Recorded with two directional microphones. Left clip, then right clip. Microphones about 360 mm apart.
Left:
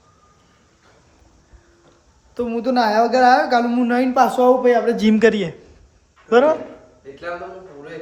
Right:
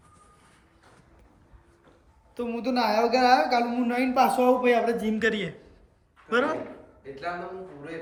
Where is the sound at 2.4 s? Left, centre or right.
Centre.